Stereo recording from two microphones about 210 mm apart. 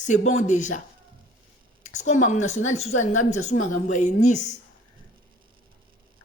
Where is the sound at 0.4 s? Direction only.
35° left (ahead or behind).